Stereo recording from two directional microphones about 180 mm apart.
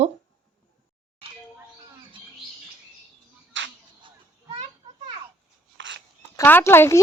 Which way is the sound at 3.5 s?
90° right.